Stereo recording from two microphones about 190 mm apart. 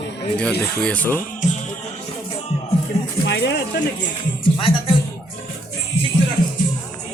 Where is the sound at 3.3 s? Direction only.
65° left (ahead or behind).